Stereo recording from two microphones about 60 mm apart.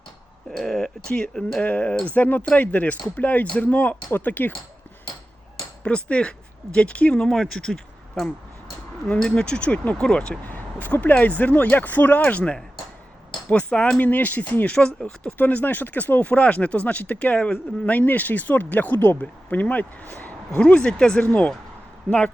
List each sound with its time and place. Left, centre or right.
0.5 s speech: centre
1.6 s speech: left
5.8 s speech: centre
10.0 s speech: centre
10.5 s speech: left
20.6 s speech: centre